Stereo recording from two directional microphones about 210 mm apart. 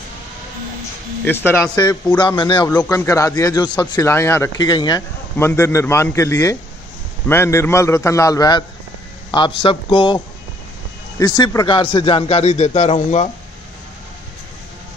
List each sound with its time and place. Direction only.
1.2 s speech: 10° left (ahead or behind)
2.7 s a man's voice: 10° left (ahead or behind); by 13.3 s 35° left (ahead or behind)